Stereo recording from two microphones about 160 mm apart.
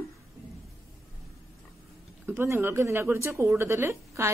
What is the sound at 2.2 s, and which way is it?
A woman's voice, 15° right (ahead or behind).